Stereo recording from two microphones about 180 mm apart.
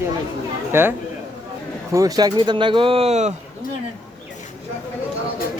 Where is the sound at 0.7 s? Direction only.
10° right (ahead or behind); by 3.3 s 40° right (ahead or behind).